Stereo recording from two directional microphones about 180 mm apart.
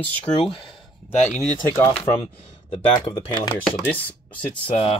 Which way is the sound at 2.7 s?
25° left (ahead or behind).